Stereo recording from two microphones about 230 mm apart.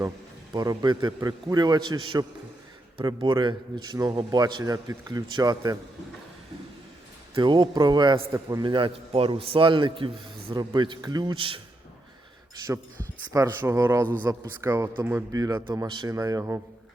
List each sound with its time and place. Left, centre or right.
0.5 s speech: centre
3.0 s a man's voice: centre
7.3 s a man's voice: centre
13.3 s speech: centre